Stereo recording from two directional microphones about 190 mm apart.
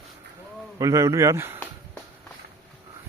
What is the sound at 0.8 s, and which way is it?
Speech, 15° right (ahead or behind).